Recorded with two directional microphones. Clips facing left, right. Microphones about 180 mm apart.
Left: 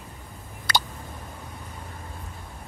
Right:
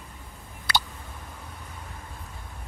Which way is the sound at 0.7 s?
45° left (ahead or behind).